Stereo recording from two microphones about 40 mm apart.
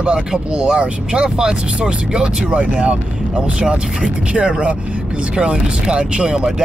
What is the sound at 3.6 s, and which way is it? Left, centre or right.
Speech, right.